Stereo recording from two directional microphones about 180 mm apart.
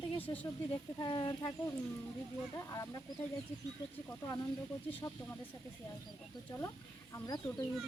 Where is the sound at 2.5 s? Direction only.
15° left (ahead or behind).